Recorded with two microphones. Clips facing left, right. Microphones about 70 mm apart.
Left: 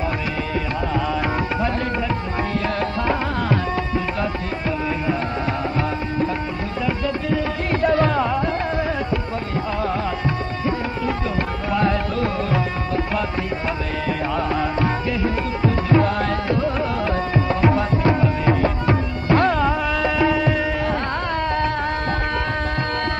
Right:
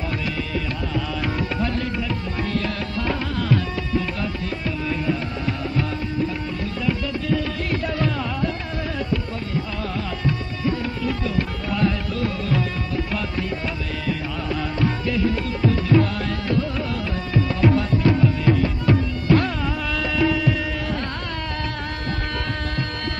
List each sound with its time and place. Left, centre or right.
3.1 s music: left
5.8 s music: left
6.9 s music: left
10.6 s music: left